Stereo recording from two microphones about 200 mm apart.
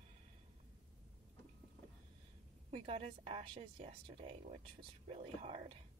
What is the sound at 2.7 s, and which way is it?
A woman's voice, 30° right (ahead or behind).